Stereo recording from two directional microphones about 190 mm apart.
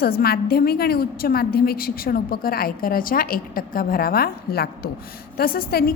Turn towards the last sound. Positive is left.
turn(degrees=50)  # may be behind; listen again after turning